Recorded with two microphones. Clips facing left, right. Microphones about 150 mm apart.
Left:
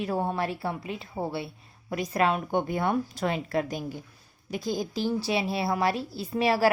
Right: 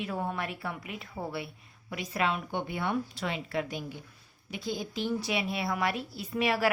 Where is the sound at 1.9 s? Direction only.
40° left (ahead or behind).